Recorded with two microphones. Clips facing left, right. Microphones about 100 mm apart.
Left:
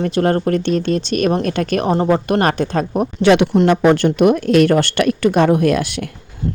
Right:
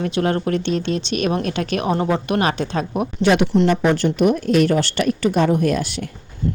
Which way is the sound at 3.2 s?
85° left.